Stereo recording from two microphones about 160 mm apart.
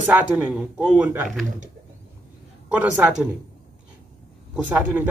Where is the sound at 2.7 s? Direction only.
10° right (ahead or behind).